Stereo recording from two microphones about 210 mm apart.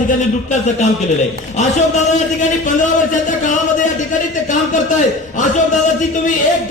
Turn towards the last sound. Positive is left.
turn(degrees=35)  # may be behind; listen again after turning